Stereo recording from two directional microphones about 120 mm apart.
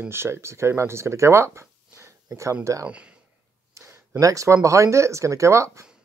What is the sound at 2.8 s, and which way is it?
Speech, 10° right (ahead or behind).